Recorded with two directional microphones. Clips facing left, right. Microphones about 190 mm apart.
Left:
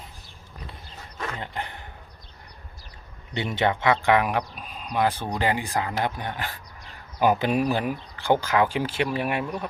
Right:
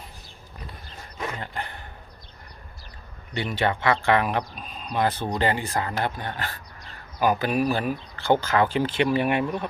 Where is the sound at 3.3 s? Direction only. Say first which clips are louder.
Left 1 dB; 20° left (ahead or behind); by 9.7 s 5° left (ahead or behind).